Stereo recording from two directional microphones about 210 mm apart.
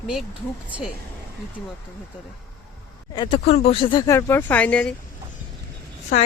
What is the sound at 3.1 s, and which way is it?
Speech, 25° left (ahead or behind).